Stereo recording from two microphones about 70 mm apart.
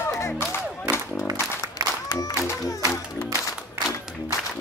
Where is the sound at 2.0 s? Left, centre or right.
Left.